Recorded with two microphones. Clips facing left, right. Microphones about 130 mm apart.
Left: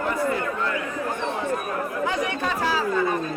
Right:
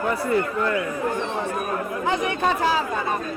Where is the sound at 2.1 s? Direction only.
25° right (ahead or behind).